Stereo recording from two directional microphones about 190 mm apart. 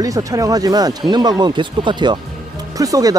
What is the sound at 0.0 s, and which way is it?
Speech, 15° right (ahead or behind).